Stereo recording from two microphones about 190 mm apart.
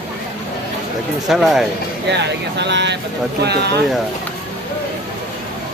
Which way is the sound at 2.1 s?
65° right (ahead or behind).